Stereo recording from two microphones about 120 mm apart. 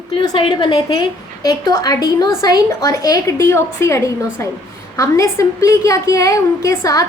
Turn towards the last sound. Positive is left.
turn(degrees=25)  # may be behind; listen again after turning